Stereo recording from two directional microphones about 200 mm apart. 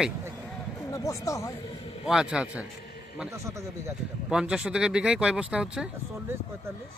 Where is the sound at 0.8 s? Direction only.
15° left (ahead or behind).